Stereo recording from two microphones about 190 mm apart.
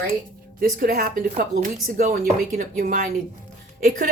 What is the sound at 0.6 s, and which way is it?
Speech, 50° right (ahead or behind).